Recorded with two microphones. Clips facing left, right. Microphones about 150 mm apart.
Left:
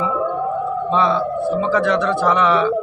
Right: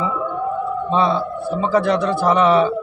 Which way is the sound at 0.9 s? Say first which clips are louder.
Even; 35° right (ahead or behind).